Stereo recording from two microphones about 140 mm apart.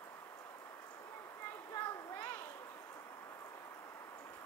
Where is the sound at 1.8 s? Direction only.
15° left (ahead or behind).